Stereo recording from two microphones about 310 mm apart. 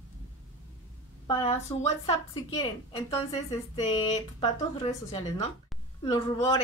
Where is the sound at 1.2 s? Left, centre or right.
Centre.